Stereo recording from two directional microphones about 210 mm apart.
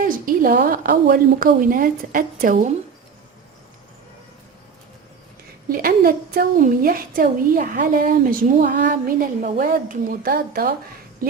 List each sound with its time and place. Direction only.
0.0 s a woman's voice: 45° right (ahead or behind)
5.6 s a woman's voice: 45° right (ahead or behind)